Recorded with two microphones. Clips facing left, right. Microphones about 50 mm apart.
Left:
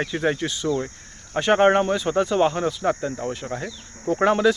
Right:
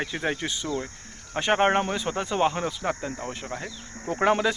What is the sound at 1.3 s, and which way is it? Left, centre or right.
Speech, centre.